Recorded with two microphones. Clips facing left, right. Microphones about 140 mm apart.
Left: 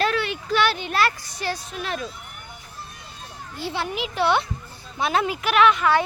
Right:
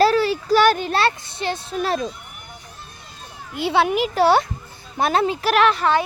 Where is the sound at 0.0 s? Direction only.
35° right (ahead or behind).